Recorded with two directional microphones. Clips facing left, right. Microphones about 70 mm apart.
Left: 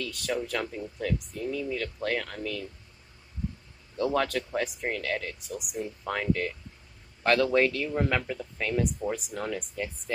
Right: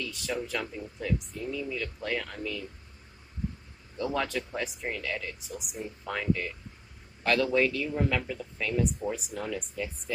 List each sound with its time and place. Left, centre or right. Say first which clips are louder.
0.0 s speech: left 2 dB; left
3.9 s speech: left 4 dB; left
7.5 s speech: left 2 dB; left